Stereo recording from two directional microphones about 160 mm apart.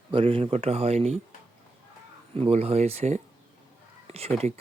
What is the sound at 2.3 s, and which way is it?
Speech, 40° right (ahead or behind).